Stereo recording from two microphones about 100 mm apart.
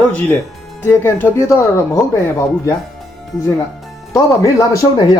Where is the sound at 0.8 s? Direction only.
20° left (ahead or behind).